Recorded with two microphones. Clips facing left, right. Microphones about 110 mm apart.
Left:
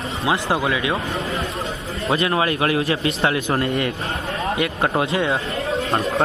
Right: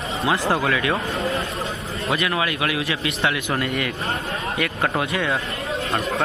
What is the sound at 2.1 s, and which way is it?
A man's voice, 30° left (ahead or behind).